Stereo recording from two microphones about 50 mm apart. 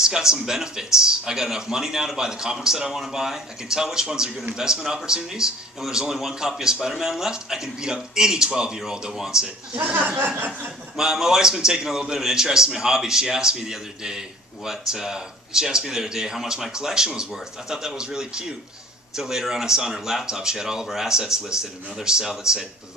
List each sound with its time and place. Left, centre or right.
0.0 s a man's voice: centre
9.9 s speech: right
11.0 s a man's voice: centre